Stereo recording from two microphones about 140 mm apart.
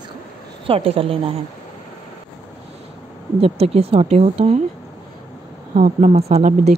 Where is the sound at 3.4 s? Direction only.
45° right (ahead or behind).